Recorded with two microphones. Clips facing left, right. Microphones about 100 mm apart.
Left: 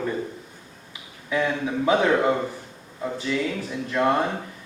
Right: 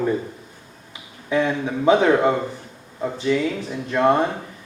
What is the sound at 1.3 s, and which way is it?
Speech, 25° right (ahead or behind).